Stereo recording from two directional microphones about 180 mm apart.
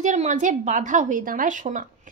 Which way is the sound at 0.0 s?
40° right (ahead or behind).